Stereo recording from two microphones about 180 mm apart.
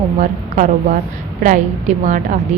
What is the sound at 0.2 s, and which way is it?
A woman's voice, 40° right (ahead or behind).